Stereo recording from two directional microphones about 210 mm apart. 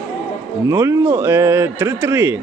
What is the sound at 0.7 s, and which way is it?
Speech, 15° right (ahead or behind).